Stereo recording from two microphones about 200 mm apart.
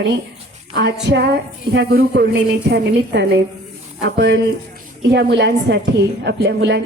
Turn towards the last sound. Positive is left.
turn(degrees=-60)  # may be behind; listen again after turning